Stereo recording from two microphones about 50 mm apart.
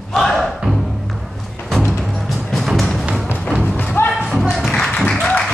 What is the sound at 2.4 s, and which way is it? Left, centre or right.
Music, centre.